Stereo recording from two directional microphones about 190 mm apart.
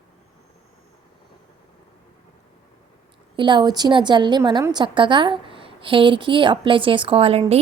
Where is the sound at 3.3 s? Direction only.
25° right (ahead or behind).